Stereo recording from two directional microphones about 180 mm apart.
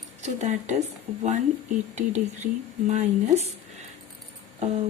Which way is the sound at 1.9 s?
40° right (ahead or behind).